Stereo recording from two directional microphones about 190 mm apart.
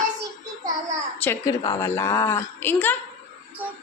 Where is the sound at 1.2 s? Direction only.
15° left (ahead or behind).